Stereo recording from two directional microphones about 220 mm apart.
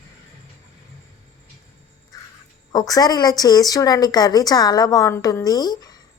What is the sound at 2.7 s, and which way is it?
Speech, 15° left (ahead or behind).